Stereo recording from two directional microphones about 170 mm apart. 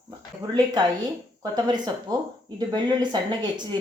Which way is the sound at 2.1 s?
20° right (ahead or behind).